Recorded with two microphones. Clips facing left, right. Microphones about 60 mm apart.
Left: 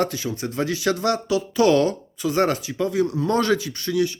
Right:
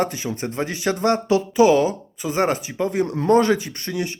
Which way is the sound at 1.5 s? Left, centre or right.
Centre.